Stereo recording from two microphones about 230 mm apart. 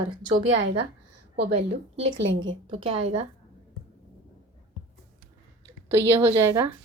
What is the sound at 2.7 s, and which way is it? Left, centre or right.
Speech, right.